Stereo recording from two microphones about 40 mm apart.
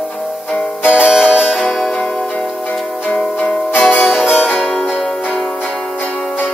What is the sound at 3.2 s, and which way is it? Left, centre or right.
Music, centre.